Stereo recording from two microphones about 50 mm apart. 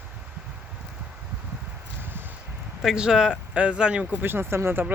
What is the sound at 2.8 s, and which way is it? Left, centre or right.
Speech, centre.